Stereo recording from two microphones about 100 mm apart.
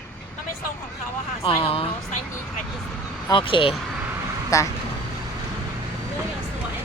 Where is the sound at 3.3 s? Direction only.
55° left (ahead or behind).